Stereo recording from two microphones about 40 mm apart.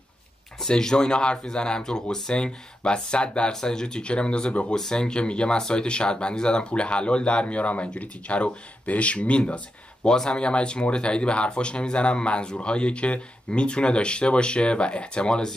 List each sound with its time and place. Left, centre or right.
0.7 s speech: centre
10.0 s speech: centre